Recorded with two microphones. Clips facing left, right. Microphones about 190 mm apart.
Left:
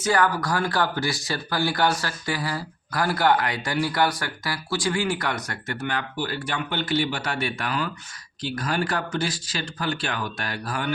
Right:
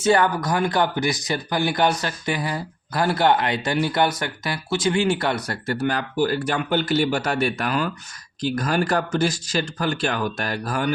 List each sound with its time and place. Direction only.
0.0 s speech: 25° right (ahead or behind); by 10.8 s 45° right (ahead or behind)